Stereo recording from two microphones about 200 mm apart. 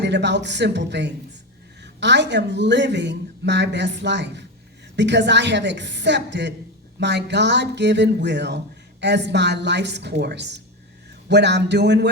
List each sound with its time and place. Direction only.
0.0 s speech: 60° right (ahead or behind)